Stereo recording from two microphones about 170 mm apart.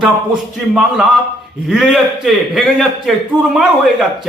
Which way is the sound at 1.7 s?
Centre (ahead or behind).